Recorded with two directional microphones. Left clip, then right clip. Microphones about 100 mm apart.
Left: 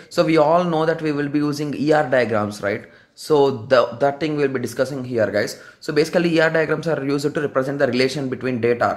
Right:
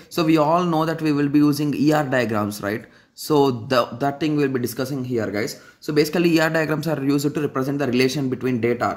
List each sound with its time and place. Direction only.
0.1 s speech: 35° right (ahead or behind)
5.1 s speech: 15° right (ahead or behind)